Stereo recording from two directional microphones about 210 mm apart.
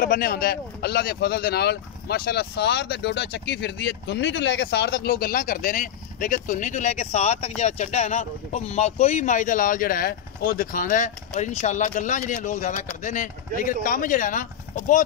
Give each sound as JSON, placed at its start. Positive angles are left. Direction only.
{"t": 0.0, "sound": "speech", "side_deg": 45}